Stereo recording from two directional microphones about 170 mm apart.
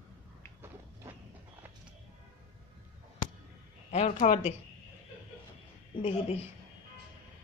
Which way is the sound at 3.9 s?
40° left (ahead or behind).